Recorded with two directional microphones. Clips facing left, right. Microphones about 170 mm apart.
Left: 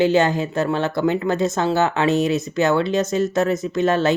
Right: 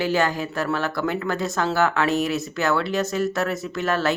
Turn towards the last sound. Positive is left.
turn(degrees=20)  # may be behind; listen again after turning